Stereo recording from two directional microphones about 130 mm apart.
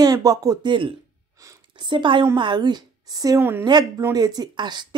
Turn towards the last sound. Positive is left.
turn(degrees=-35)  # may be behind; listen again after turning